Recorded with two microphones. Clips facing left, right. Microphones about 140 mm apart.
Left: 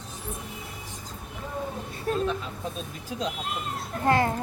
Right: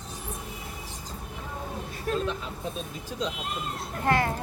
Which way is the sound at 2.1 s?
30° left (ahead or behind).